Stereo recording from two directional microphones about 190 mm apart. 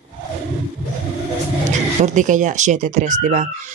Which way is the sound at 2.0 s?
40° right (ahead or behind).